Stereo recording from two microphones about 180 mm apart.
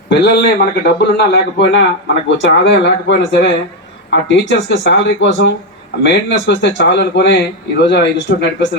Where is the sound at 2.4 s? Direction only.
90° left; by 8.7 s 70° left (ahead or behind).